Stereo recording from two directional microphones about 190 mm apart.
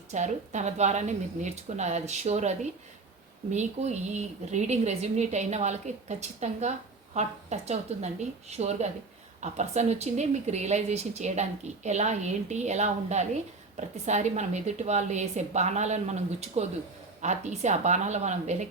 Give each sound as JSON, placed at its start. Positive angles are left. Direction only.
{"t": 0.1, "sound": "speech", "side_deg": -40}